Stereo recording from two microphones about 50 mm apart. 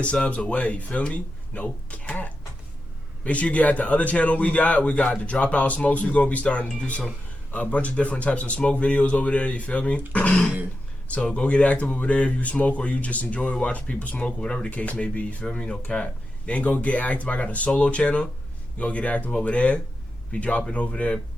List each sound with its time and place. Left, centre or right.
0.0 s a man's voice: left
14.4 s a man's voice: centre